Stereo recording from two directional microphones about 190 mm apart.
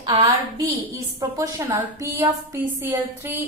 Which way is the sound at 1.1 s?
15° right (ahead or behind).